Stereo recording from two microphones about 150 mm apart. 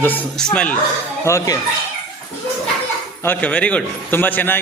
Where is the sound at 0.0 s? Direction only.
10° left (ahead or behind).